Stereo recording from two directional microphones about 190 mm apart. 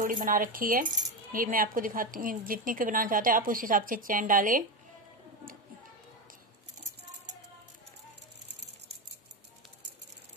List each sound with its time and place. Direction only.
0.0 s a woman's voice: 45° right (ahead or behind)